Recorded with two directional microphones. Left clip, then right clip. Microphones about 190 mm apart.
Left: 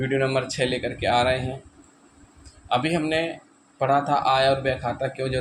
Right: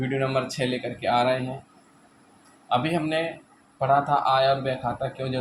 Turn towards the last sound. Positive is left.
turn(degrees=25)  # may be behind; listen again after turning